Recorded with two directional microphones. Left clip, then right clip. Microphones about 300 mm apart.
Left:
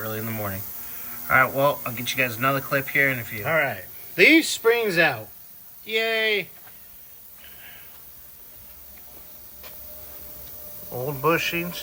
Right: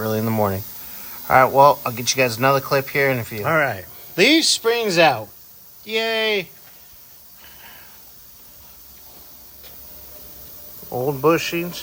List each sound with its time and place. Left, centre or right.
0.2 s speech: centre
3.4 s speech: right
4.1 s speech: centre
7.4 s a sound: centre
10.9 s speech: centre